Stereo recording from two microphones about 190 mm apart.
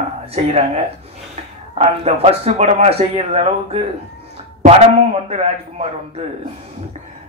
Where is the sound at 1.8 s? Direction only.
35° right (ahead or behind).